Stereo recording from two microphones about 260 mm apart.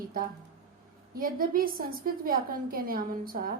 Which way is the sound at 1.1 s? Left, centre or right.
Right.